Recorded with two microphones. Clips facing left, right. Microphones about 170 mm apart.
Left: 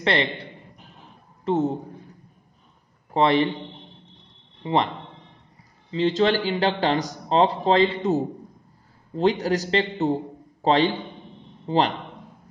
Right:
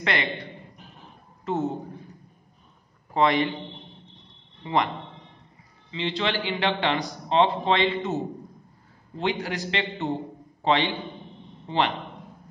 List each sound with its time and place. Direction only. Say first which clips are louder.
0.0 s a man's voice: left 4 dB; 30° left (ahead or behind)
3.1 s a man's voice: left 3 dB; 30° left (ahead or behind)
4.6 s a man's voice: left 3 dB; 30° left (ahead or behind)
5.9 s a man's voice: left 8 dB; 40° left (ahead or behind)